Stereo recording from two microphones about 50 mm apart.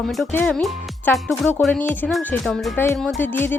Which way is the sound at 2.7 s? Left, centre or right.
Left.